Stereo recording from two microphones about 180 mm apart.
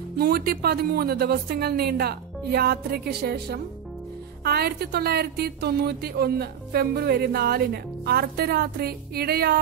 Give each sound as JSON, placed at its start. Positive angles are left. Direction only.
{"t": 0.2, "sound": "speech", "side_deg": -55}